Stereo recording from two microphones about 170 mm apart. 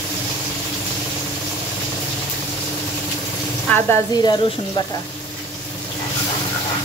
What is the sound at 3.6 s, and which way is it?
Speech, 10° left (ahead or behind).